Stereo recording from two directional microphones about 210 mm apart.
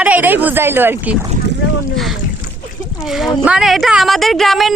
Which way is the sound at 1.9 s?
Centre (ahead or behind).